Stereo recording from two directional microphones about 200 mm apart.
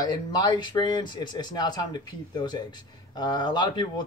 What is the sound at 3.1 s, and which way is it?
Speech, 20° left (ahead or behind).